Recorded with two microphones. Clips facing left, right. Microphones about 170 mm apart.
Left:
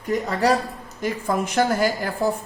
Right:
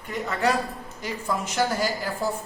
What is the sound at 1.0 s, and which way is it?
A woman's voice, 55° left (ahead or behind).